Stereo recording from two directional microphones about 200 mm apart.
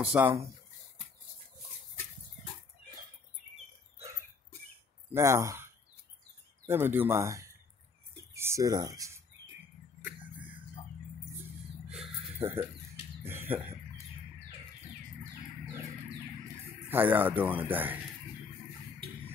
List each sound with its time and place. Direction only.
0.0 s speech: 10° right (ahead or behind)
5.1 s speech: 15° right (ahead or behind)
11.9 s a sound: 5° right (ahead or behind)
16.9 s speech: 10° right (ahead or behind)